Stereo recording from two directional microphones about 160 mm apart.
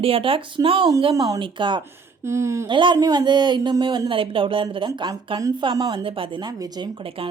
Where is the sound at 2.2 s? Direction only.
15° right (ahead or behind).